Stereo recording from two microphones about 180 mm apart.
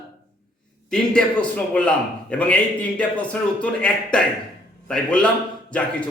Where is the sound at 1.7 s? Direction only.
5° left (ahead or behind).